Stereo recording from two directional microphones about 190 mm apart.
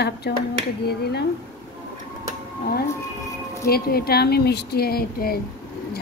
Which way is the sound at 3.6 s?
55° left (ahead or behind).